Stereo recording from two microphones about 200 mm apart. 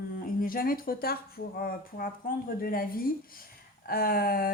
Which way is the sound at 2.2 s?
45° left (ahead or behind).